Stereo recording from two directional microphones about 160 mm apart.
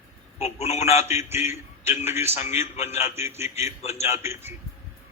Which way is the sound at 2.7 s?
40° left (ahead or behind).